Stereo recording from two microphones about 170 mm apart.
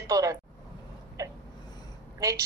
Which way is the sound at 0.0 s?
20° right (ahead or behind).